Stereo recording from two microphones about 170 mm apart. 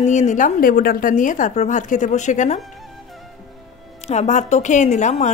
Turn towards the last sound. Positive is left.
turn(degrees=45)  # may be behind; listen again after turning